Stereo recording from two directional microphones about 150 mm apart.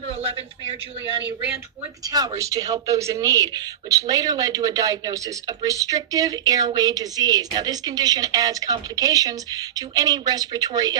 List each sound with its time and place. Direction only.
0.1 s speech: 40° right (ahead or behind)
2.0 s speech: 25° right (ahead or behind)